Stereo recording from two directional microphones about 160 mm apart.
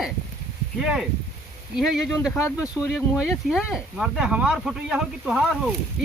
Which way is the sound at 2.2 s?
5° right (ahead or behind).